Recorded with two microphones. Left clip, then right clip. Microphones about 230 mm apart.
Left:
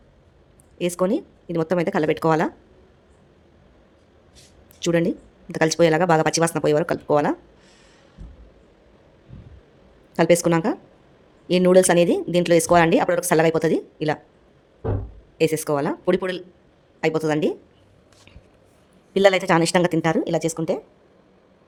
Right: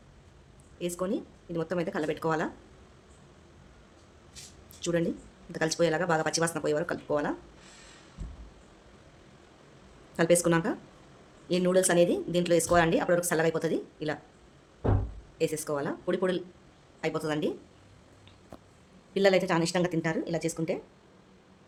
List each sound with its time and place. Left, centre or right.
0.8 s speech: left
4.8 s speech: left
10.2 s speech: left
15.4 s speech: left
19.1 s speech: left